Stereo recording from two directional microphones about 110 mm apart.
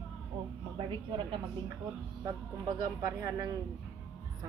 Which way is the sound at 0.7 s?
45° right (ahead or behind).